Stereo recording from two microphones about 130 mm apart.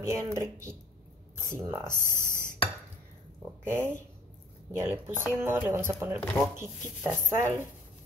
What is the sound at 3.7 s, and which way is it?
Speech, 20° right (ahead or behind).